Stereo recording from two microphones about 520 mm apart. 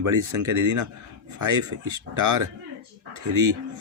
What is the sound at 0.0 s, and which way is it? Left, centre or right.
Speech, right.